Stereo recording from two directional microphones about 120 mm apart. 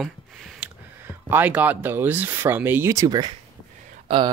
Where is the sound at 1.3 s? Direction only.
15° right (ahead or behind).